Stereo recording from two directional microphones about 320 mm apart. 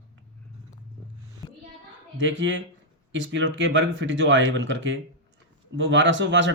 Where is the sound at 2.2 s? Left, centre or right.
Right.